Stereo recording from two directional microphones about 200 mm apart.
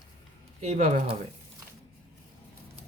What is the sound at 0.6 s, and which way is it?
Speech, 35° right (ahead or behind).